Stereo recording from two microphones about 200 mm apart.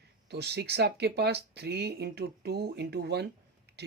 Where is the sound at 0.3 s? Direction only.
55° right (ahead or behind).